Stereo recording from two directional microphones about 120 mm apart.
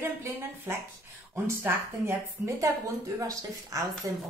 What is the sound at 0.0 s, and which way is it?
Speech, 20° right (ahead or behind).